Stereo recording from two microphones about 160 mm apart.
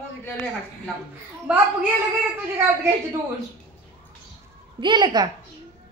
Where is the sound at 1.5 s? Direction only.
10° right (ahead or behind).